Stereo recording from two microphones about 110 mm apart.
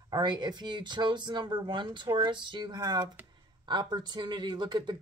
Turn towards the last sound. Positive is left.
turn(degrees=-45)  # may be behind; listen again after turning